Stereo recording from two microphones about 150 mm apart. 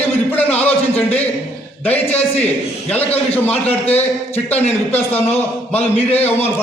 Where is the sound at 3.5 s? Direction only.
40° left (ahead or behind).